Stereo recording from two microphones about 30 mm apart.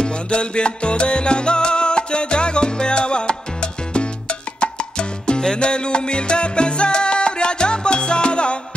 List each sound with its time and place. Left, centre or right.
0.0 s music: left
5.4 s salsa music: left